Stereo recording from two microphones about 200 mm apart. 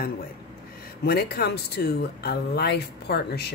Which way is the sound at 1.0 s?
50° left (ahead or behind).